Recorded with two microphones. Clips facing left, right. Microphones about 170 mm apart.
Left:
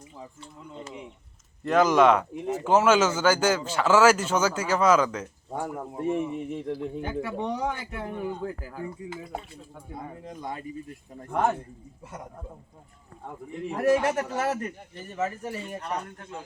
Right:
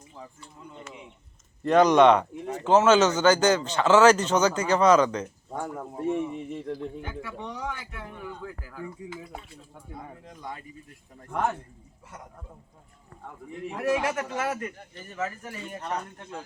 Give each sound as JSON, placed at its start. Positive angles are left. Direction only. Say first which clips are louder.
{"t": 1.6, "sound": "speech", "louder": "right 2 dB", "side_deg": 0}
{"t": 7.1, "sound": "speech", "louder": "left 7 dB", "side_deg": 40}
{"t": 11.2, "sound": "speech", "louder": "left 3 dB", "side_deg": 25}
{"t": 14.0, "sound": "speech", "louder": "left 2 dB", "side_deg": 35}